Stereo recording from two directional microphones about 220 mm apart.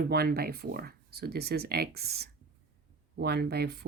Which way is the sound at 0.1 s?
45° right (ahead or behind).